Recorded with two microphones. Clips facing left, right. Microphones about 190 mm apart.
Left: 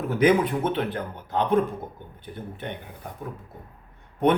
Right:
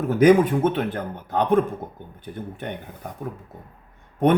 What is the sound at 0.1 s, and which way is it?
Speech, 45° right (ahead or behind).